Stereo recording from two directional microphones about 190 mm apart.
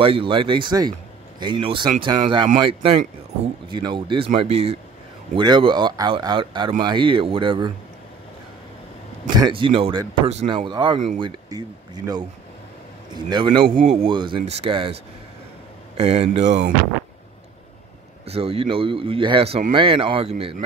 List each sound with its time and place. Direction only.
0.0 s speech: 30° right (ahead or behind)
9.3 s speech: 25° right (ahead or behind)
16.0 s speech: 35° right (ahead or behind)
18.2 s speech: 30° right (ahead or behind)